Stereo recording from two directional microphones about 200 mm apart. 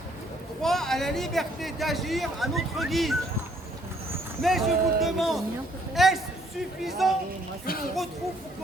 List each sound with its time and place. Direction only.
0.6 s speech: centre (ahead or behind)
4.4 s a man's voice: centre (ahead or behind)